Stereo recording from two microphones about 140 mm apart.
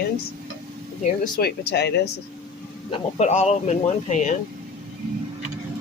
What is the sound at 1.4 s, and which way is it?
Speech, 90° left.